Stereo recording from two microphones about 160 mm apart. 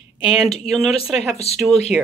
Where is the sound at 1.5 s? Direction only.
40° left (ahead or behind).